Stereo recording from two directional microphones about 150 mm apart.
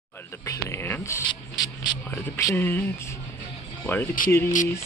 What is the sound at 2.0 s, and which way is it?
Speech, 15° left (ahead or behind).